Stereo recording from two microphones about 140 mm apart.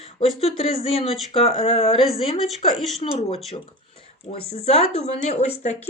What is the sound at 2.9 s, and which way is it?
Speech, 45° left (ahead or behind).